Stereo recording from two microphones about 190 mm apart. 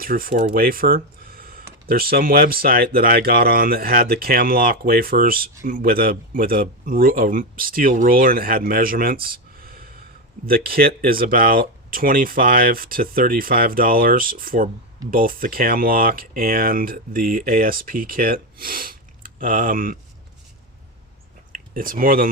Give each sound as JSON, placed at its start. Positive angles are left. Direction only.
{"t": 0.0, "sound": "speech", "side_deg": -50}
{"t": 21.5, "sound": "speech", "side_deg": -45}